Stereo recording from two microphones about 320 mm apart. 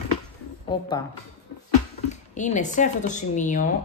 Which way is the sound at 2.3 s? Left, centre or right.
Left.